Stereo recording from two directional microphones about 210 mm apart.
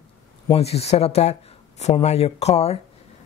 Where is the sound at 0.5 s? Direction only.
30° left (ahead or behind).